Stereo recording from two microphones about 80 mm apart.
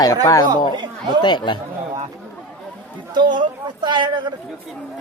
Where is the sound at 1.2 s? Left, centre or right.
Left.